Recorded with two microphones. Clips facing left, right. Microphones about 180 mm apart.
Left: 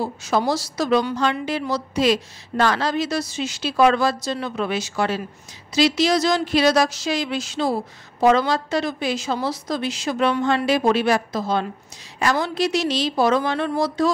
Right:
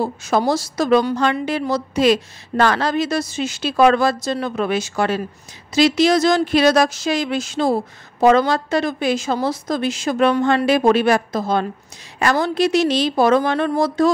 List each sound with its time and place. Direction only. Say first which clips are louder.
0.0 s speech: right 3 dB; 50° right (ahead or behind)